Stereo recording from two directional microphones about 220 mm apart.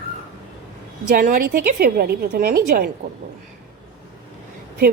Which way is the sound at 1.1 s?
35° right (ahead or behind).